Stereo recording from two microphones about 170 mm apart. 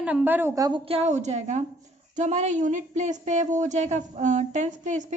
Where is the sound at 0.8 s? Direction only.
35° right (ahead or behind).